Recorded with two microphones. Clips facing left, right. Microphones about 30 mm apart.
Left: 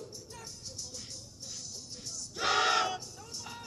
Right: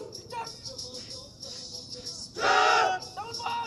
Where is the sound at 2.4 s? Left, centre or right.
Centre.